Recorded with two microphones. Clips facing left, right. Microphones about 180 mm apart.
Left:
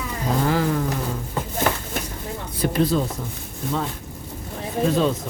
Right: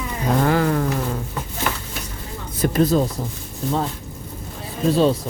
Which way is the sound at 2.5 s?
45° right (ahead or behind).